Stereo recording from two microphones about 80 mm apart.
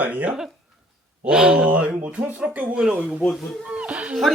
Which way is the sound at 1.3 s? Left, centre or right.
Centre.